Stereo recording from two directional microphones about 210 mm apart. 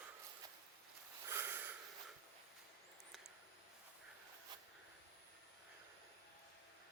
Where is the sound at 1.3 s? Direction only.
10° right (ahead or behind).